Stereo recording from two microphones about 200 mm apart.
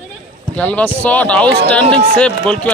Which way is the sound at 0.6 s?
5° left (ahead or behind).